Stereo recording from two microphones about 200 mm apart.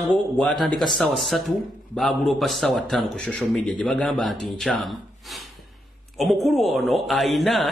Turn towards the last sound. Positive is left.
turn(degrees=0)  # may be behind; listen again after turning